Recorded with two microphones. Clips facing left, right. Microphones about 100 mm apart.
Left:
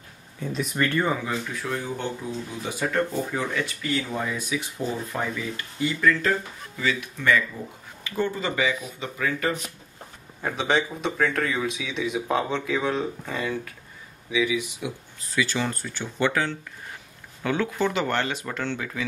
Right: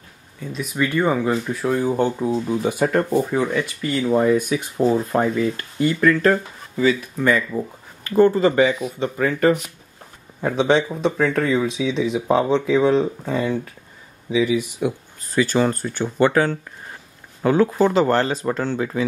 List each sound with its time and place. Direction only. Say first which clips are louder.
0.4 s speech: right 2 dB; centre (ahead or behind)
0.8 s speech: right 6 dB; 15° right (ahead or behind)
1.1 s speech: right 7 dB; 35° right (ahead or behind)
2.0 s speech: right 10 dB; 50° right (ahead or behind)
6.8 s speech: right 9 dB; 40° right (ahead or behind)
10.4 s speech: right 6 dB; 25° right (ahead or behind)
14.3 s speech: right 5 dB; 45° right (ahead or behind)